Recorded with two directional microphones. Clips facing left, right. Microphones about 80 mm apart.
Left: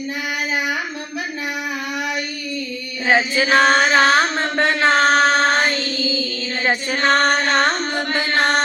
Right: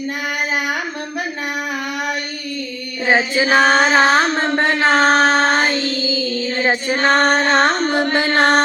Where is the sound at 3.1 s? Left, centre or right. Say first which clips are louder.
Right 1 dB; centre.